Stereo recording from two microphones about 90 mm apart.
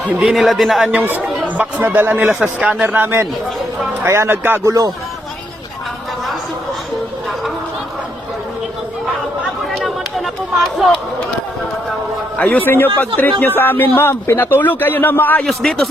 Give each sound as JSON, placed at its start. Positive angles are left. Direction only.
{"t": 0.2, "sound": "speech", "side_deg": -5}
{"t": 0.9, "sound": "speech", "side_deg": -20}
{"t": 4.6, "sound": "speech", "side_deg": -40}
{"t": 9.7, "sound": "a sound", "side_deg": 0}
{"t": 12.4, "sound": "a man's voice", "side_deg": 20}
{"t": 15.4, "sound": "speech", "side_deg": 0}